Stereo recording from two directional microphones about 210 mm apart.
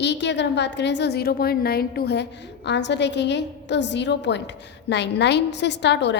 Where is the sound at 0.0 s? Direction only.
55° left (ahead or behind).